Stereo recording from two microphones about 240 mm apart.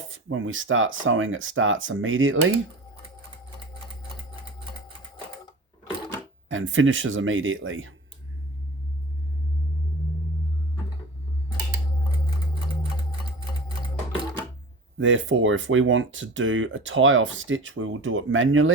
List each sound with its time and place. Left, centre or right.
0.0 s speech: right
6.5 s speech: right
14.9 s speech: right